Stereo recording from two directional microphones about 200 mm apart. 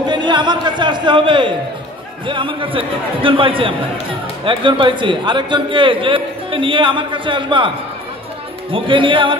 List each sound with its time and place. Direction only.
0.0 s a sound: 20° right (ahead or behind)
2.2 s a man's voice: 25° right (ahead or behind)
8.7 s a man's voice: 25° right (ahead or behind)